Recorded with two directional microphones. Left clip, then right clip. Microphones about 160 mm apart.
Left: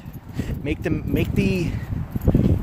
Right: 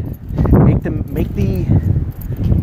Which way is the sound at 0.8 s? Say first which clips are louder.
Right 2 dB; 20° left (ahead or behind).